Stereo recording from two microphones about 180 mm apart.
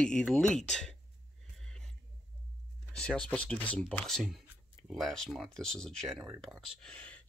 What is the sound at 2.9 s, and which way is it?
Speech, 5° left (ahead or behind).